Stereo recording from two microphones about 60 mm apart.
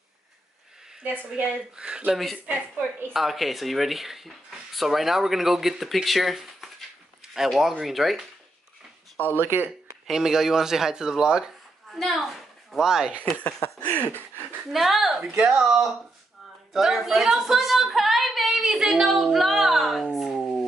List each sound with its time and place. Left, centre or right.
1.4 s speech: centre
2.1 s speech: centre
2.4 s a woman's voice: right
3.1 s speech: centre
9.4 s speech: right
10.0 s speech: centre
11.9 s a woman's voice: centre
13.5 s a sound: left
14.7 s speech: centre